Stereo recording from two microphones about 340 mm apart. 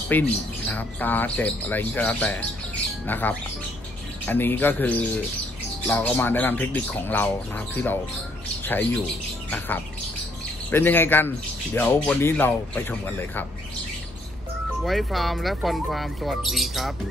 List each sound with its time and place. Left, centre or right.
0.1 s speech: centre
2.8 s bird: centre
4.3 s speech: centre
10.7 s speech: centre
14.8 s speech: centre